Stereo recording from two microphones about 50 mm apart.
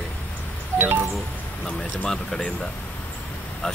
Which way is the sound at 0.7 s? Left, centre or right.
Right.